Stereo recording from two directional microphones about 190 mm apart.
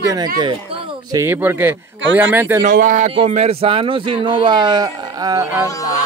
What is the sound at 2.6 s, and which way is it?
Speech, 45° right (ahead or behind).